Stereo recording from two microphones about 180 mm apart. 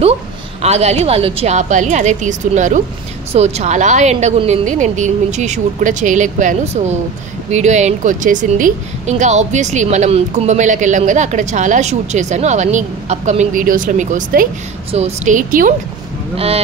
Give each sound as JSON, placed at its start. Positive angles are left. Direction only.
{"t": 0.6, "sound": "a woman's voice", "side_deg": -35}
{"t": 14.9, "sound": "a woman's voice", "side_deg": -35}